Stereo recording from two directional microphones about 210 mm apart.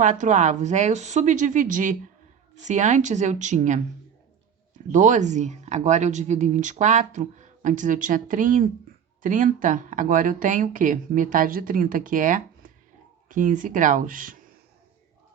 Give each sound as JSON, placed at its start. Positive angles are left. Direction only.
{"t": 0.0, "sound": "speech", "side_deg": -35}
{"t": 4.9, "sound": "speech", "side_deg": -35}